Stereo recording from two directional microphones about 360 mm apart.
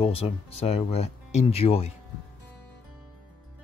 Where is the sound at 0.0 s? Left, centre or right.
Centre.